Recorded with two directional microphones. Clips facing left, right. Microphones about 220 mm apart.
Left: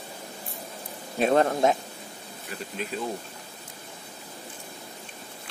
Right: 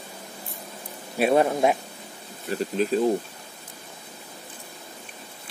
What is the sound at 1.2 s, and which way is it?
Speech, 10° right (ahead or behind).